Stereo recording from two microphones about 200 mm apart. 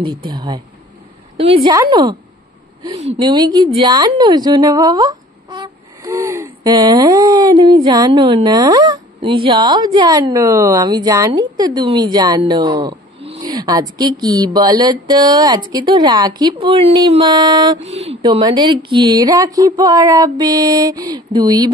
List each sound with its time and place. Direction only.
0.0 s speech: 20° right (ahead or behind)
1.7 s speech: 20° right (ahead or behind)
3.2 s speech: 20° right (ahead or behind)
17.8 s speech: 30° right (ahead or behind)
18.2 s speech: 20° right (ahead or behind)